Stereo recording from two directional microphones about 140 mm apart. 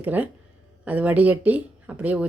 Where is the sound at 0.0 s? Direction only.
10° right (ahead or behind).